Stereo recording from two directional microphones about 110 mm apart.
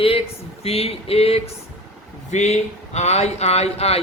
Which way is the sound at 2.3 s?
90° left.